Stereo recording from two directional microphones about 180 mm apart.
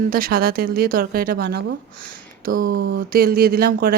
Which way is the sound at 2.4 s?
50° right (ahead or behind).